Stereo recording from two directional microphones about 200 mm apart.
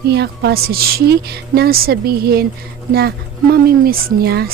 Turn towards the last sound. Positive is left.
turn(degrees=-50)  # may be behind; listen again after turning